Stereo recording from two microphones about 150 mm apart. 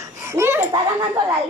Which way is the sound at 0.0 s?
20° right (ahead or behind).